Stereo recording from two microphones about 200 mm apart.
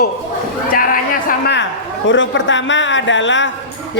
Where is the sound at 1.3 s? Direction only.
55° left (ahead or behind).